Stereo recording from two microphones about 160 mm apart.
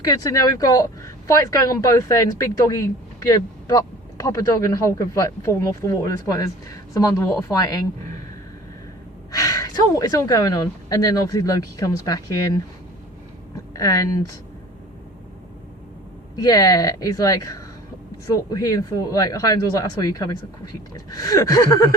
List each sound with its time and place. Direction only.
0.0 s speech: 20° left (ahead or behind)
9.3 s speech: 20° left (ahead or behind)
13.7 s speech: 20° left (ahead or behind)
16.4 s speech: 20° left (ahead or behind)